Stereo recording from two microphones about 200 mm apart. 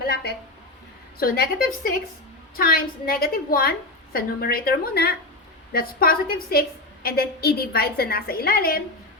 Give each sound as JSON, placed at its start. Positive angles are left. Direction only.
{"t": 1.2, "sound": "a woman's voice", "side_deg": 45}